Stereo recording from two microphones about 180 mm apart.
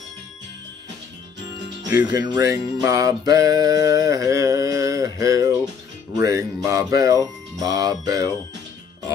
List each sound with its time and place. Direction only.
1.9 s music: 15° right (ahead or behind)
6.1 s speech: 20° right (ahead or behind)